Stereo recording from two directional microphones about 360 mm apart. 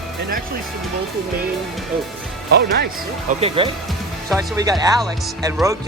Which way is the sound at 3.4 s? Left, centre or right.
Centre.